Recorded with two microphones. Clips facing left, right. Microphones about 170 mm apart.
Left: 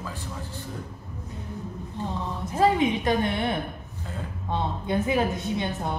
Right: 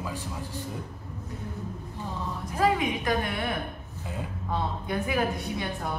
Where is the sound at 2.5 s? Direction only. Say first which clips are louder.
Left 4 dB; 25° left (ahead or behind).